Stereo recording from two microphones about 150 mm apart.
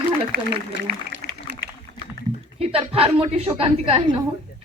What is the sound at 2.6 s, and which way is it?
A woman's voice, 40° right (ahead or behind).